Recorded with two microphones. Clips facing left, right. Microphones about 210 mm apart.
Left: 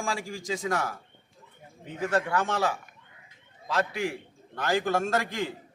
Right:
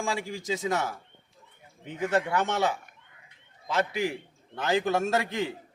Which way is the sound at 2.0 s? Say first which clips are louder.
Right 1 dB; 20° right (ahead or behind).